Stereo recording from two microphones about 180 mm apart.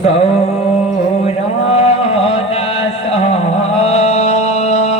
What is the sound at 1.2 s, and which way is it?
Music, 35° left (ahead or behind).